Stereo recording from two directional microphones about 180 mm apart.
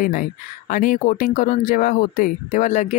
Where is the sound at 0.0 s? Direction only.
50° left (ahead or behind).